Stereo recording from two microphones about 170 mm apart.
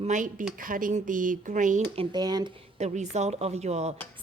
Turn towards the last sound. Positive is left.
turn(degrees=-40)  # may be behind; listen again after turning